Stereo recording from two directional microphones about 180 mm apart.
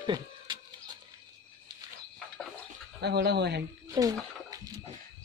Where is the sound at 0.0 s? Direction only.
25° right (ahead or behind).